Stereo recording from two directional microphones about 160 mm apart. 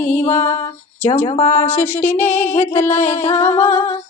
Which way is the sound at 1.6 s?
15° left (ahead or behind).